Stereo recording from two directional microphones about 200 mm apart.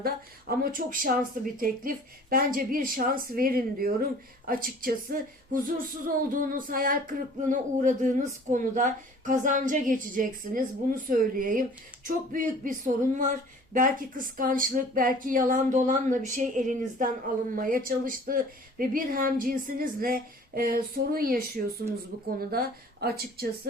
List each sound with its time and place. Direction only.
0.0 s speech: 45° right (ahead or behind)